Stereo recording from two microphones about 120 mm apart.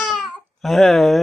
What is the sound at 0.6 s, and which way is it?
Speech, centre (ahead or behind).